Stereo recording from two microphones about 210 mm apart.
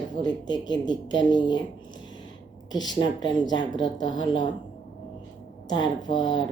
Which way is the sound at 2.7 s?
20° left (ahead or behind).